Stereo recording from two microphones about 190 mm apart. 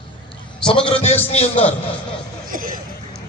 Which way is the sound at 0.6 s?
30° left (ahead or behind).